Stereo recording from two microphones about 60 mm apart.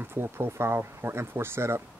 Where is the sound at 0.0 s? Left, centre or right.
Right.